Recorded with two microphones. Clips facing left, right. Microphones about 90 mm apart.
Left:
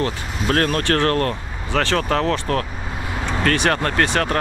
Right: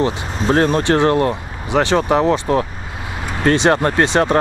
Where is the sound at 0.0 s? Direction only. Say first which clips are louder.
Right 5 dB; 20° right (ahead or behind).